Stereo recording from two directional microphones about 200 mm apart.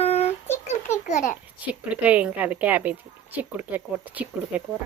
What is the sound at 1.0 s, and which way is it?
Speech, 35° left (ahead or behind).